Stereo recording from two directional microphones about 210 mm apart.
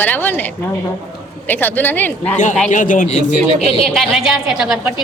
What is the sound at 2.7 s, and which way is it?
A man's voice, 40° left (ahead or behind).